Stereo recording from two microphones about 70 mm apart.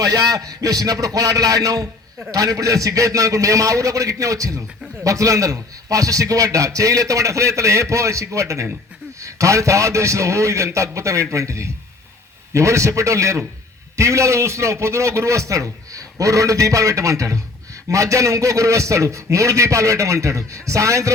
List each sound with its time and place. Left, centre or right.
0.0 s a man's voice: right